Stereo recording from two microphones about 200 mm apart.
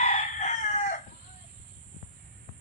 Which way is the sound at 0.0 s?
35° left (ahead or behind).